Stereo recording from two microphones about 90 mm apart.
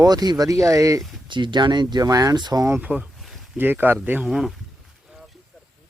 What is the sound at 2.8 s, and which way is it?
Speech, 15° right (ahead or behind).